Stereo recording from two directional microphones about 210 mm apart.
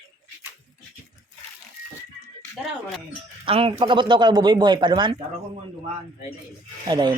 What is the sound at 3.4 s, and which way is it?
Speech, 25° right (ahead or behind).